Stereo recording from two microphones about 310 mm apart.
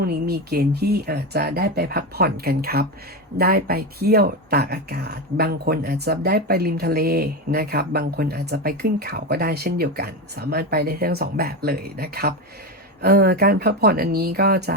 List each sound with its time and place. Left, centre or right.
0.0 s speech: right